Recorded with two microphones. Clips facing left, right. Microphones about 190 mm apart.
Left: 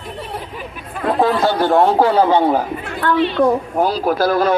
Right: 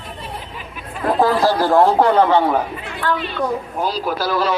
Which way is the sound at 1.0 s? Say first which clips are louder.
Even; centre (ahead or behind).